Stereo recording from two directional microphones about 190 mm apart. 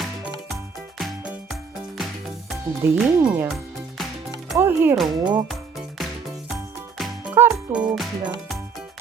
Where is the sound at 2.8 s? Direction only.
10° right (ahead or behind).